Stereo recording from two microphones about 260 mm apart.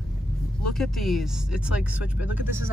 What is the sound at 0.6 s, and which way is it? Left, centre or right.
Speech, centre.